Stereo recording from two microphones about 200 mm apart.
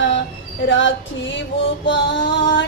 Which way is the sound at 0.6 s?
70° left (ahead or behind).